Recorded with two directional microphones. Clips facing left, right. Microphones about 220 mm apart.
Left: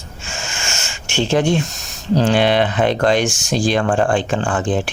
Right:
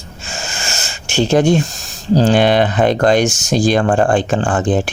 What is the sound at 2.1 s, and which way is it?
Speech, 40° right (ahead or behind).